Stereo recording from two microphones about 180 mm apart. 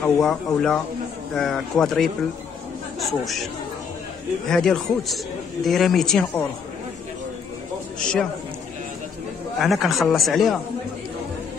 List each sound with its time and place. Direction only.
0.0 s a man's voice: centre (ahead or behind)
4.5 s a man's voice: centre (ahead or behind)
9.6 s a man's voice: centre (ahead or behind)